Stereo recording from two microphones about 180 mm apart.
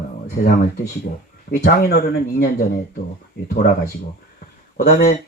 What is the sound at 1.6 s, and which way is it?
Speech, 60° left (ahead or behind).